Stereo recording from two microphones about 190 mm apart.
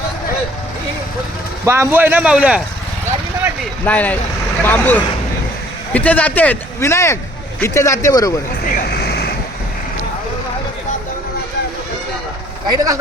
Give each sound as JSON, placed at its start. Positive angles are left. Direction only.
{"t": 1.6, "sound": "speech", "side_deg": -15}
{"t": 3.8, "sound": "speech", "side_deg": 10}
{"t": 8.7, "sound": "vehicle", "side_deg": 55}
{"t": 12.6, "sound": "a man's voice", "side_deg": -20}